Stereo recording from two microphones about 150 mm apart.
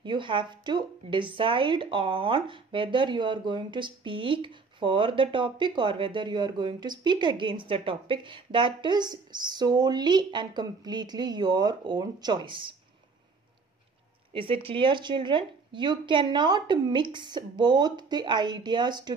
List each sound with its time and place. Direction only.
0.0 s speech: 30° right (ahead or behind)
14.3 s speech: 35° right (ahead or behind)